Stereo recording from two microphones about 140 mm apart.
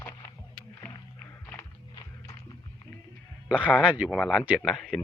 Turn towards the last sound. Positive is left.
turn(degrees=5)  # may be behind; listen again after turning